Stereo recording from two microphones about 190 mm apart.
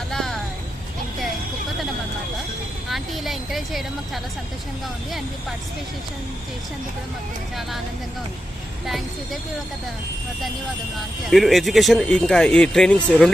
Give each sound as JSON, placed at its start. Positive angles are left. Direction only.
{"t": 0.1, "sound": "a sound", "side_deg": 0}
{"t": 2.9, "sound": "a woman's voice", "side_deg": 0}
{"t": 8.9, "sound": "speech", "side_deg": 0}
{"t": 11.3, "sound": "speech", "side_deg": 0}